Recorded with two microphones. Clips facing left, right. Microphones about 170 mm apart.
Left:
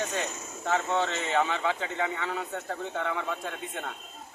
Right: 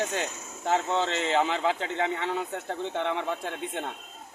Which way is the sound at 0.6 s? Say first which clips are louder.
Right 1 dB; 25° right (ahead or behind).